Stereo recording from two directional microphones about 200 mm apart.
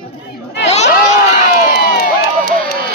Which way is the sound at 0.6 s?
35° left (ahead or behind).